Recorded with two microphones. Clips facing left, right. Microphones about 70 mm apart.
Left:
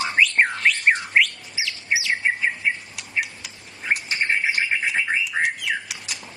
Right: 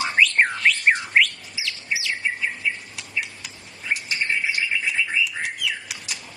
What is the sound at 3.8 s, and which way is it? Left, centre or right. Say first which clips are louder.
Bird: left 2 dB; left.